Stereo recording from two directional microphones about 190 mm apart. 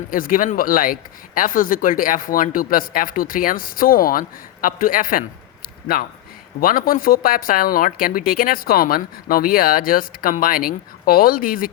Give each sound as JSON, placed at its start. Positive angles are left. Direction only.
{"t": 0.1, "sound": "speech", "side_deg": 45}